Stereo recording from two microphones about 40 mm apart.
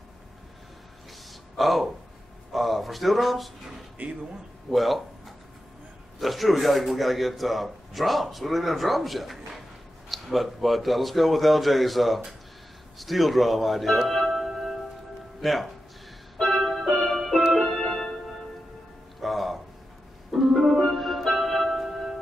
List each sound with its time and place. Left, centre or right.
1.6 s a man's voice: centre
4.0 s speech: right
4.6 s a man's voice: centre
16.3 s music: centre
19.2 s music: centre
21.6 s music: centre